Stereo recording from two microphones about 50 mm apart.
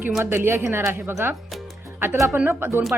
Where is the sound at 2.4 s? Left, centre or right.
Right.